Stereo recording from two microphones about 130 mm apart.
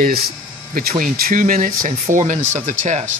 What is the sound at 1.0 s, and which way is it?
Speech, 90° right.